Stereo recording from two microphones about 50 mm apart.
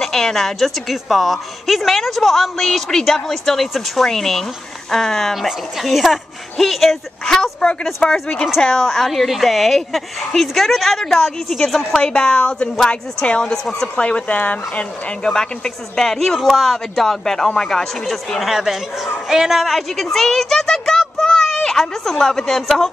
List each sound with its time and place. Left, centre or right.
0.0 s a woman's voice: centre
8.5 s a woman's voice: centre
13.5 s a woman's voice: centre
13.9 s speech: left
15.3 s a woman's voice: centre
19.6 s a woman's voice: centre
21.2 s a sound: centre
21.5 s a woman's voice: centre